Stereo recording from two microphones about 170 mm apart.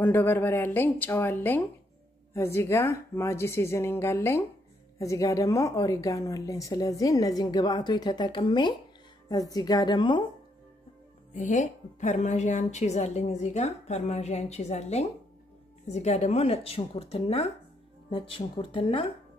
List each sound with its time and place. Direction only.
0.0 s a woman's voice: 10° left (ahead or behind); by 10.2 s 30° left (ahead or behind)
11.3 s a woman's voice: 45° left (ahead or behind)